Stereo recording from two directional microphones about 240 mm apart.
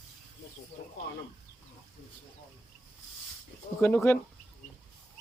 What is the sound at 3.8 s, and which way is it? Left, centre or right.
Speech, centre.